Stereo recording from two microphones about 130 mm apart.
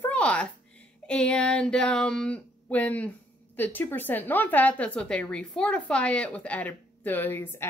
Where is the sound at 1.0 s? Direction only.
10° left (ahead or behind).